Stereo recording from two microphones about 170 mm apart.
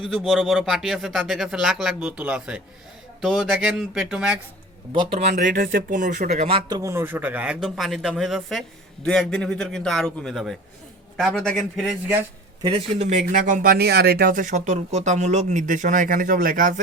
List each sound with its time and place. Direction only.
0.0 s speech: centre (ahead or behind)
5.4 s speech: 55° right (ahead or behind)
6.7 s speech: 20° right (ahead or behind)
12.6 s speech: 35° right (ahead or behind); by 16.8 s 50° right (ahead or behind)